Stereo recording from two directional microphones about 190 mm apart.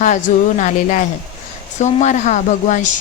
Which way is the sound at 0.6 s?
40° left (ahead or behind).